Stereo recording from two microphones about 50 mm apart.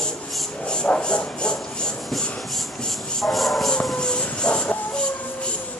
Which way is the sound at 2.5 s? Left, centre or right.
Centre.